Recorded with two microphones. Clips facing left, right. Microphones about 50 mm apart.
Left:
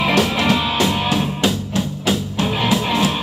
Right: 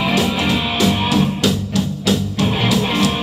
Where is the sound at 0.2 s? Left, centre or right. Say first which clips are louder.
Left 1 dB; left.